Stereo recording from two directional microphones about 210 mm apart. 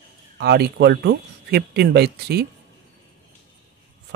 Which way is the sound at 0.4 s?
50° right (ahead or behind).